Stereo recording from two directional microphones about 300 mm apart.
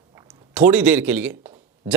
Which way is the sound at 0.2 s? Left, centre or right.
Centre.